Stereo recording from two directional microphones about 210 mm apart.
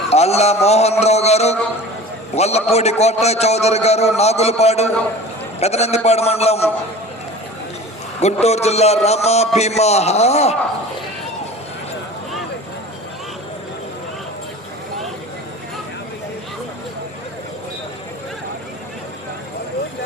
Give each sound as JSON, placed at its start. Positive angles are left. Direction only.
{"t": 0.1, "sound": "a man's voice", "side_deg": 30}
{"t": 8.2, "sound": "a man's voice", "side_deg": 30}